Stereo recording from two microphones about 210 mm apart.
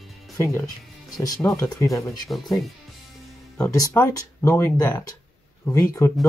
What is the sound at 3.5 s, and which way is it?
Speech, 10° left (ahead or behind).